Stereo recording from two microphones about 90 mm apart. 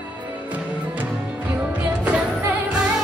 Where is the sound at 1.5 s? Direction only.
15° right (ahead or behind).